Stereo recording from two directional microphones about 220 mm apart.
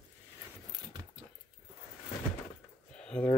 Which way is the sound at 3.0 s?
5° left (ahead or behind).